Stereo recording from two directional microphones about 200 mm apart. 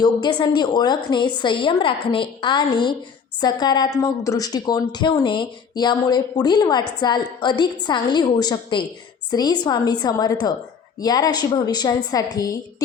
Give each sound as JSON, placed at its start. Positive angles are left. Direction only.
{"t": 0.0, "sound": "a woman's voice", "side_deg": 25}